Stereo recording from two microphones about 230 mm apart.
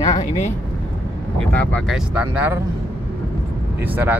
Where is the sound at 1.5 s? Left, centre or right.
Centre.